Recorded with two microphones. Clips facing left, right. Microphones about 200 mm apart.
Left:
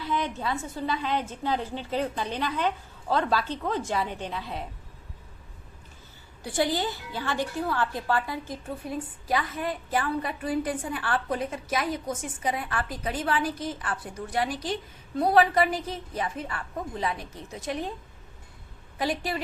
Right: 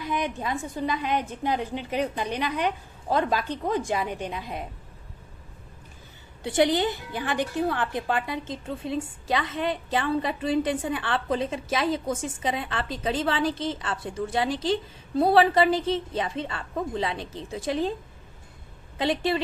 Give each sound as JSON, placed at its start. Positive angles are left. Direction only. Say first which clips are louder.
{"t": 0.0, "sound": "a woman's voice", "louder": "right 1 dB", "side_deg": -15}
{"t": 6.4, "sound": "a woman's voice", "louder": "right 5 dB", "side_deg": -20}
{"t": 18.9, "sound": "a woman's voice", "louder": "right 4 dB", "side_deg": -25}